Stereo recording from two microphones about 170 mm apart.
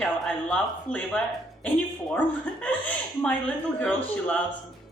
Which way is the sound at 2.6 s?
10° left (ahead or behind).